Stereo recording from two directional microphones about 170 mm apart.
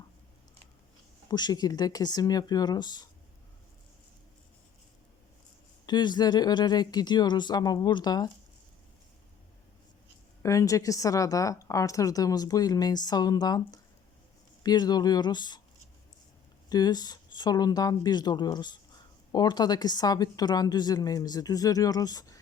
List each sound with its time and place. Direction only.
1.3 s a woman's voice: 25° left (ahead or behind)
5.8 s a woman's voice: 25° left (ahead or behind)
10.4 s a woman's voice: 20° left (ahead or behind)
16.6 s a woman's voice: 25° left (ahead or behind)